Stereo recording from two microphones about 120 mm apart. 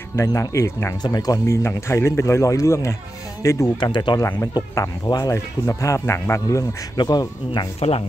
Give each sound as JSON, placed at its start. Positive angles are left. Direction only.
{"t": 0.1, "sound": "speech", "side_deg": 25}
{"t": 1.0, "sound": "speech", "side_deg": 35}
{"t": 3.8, "sound": "speech", "side_deg": 40}
{"t": 4.2, "sound": "speech", "side_deg": 25}
{"t": 7.0, "sound": "speech", "side_deg": 35}